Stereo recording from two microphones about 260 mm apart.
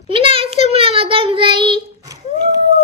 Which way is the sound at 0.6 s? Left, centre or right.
Right.